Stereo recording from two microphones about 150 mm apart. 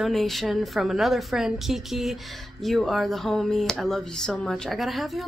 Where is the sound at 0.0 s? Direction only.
Centre (ahead or behind).